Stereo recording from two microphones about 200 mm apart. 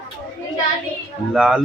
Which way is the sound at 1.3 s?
Centre (ahead or behind).